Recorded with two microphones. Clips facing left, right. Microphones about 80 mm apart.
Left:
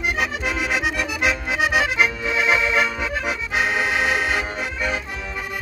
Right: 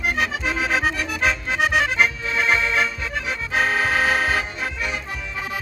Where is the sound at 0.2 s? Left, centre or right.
Centre.